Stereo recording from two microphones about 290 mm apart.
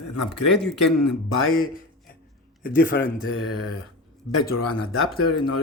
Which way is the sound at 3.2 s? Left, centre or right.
Left.